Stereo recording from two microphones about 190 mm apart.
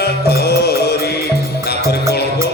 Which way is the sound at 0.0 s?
55° left (ahead or behind).